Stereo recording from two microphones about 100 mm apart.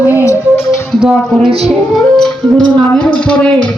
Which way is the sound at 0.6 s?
5° right (ahead or behind).